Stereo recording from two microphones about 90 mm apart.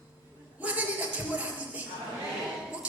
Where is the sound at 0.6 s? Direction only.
15° right (ahead or behind).